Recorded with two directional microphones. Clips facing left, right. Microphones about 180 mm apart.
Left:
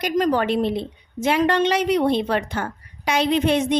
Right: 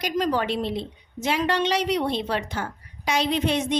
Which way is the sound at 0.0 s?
50° left (ahead or behind).